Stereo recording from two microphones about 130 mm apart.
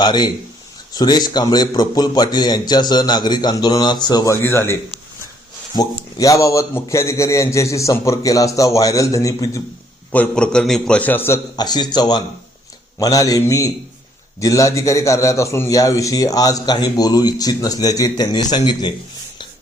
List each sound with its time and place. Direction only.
0.0 s a man's voice: 35° left (ahead or behind)
4.4 s a man's voice: 15° left (ahead or behind)
6.1 s a man's voice: 25° left (ahead or behind)
10.1 s a man's voice: 10° left (ahead or behind)
11.5 s a man's voice: 30° left (ahead or behind)